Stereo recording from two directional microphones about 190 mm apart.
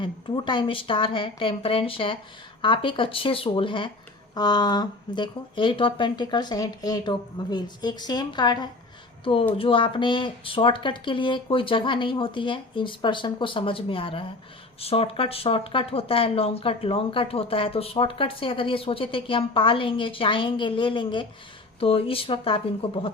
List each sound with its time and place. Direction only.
0.0 s speech: 25° left (ahead or behind)